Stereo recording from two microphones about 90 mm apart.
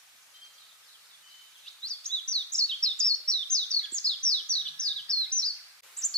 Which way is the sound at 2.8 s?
10° left (ahead or behind).